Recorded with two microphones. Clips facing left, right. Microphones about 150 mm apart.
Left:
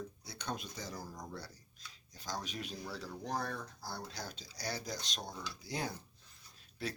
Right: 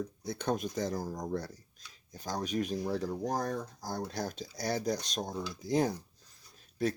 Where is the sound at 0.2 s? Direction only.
50° right (ahead or behind).